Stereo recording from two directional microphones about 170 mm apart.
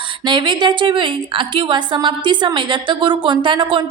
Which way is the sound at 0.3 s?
25° right (ahead or behind).